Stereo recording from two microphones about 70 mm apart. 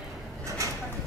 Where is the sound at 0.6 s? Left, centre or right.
Right.